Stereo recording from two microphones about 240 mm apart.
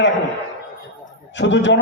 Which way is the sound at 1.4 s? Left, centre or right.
Left.